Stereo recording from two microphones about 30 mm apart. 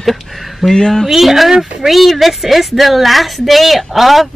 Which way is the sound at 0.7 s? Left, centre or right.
Centre.